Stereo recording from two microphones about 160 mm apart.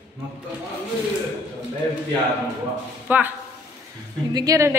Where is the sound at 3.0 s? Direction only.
10° right (ahead or behind).